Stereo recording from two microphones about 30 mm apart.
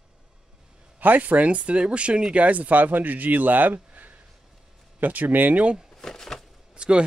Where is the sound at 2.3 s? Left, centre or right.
Right.